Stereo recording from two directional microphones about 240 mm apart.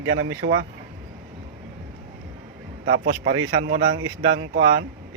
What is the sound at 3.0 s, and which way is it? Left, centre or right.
Speech, right.